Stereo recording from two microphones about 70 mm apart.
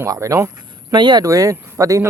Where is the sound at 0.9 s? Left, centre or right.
Right.